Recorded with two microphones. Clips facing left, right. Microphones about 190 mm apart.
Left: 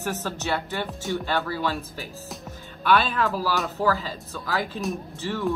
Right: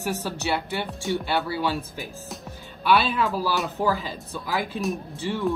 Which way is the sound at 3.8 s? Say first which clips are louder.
Even; 15° right (ahead or behind).